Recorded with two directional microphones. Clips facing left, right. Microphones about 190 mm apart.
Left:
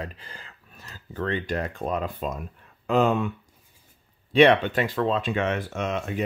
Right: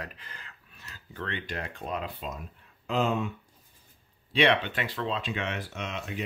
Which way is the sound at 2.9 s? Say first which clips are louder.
Left 6 dB; 60° left (ahead or behind).